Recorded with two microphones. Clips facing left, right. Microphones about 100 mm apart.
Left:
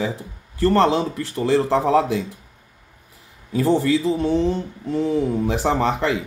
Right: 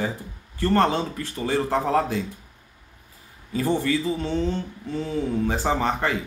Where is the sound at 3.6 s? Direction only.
65° left (ahead or behind).